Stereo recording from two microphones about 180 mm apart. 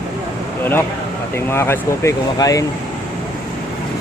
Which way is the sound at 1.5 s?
15° left (ahead or behind).